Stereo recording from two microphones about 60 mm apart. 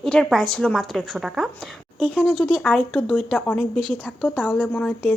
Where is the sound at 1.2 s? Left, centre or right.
Centre.